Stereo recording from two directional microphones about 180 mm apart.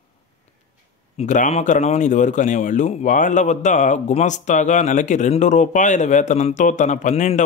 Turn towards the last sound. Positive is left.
turn(degrees=40)  # may be behind; listen again after turning